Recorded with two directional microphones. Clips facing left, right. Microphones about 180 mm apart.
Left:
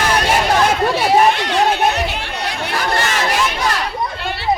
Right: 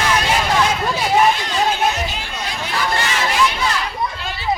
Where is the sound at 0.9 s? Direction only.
65° left (ahead or behind); by 3.1 s 50° left (ahead or behind).